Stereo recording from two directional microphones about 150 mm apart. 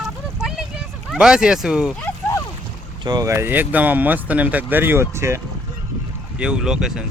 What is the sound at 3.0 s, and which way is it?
Speech, 25° right (ahead or behind).